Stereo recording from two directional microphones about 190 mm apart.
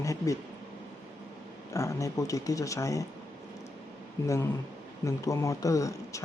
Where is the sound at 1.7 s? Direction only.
15° left (ahead or behind).